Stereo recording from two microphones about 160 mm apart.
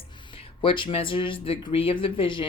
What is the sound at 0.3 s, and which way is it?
Speech, 35° left (ahead or behind).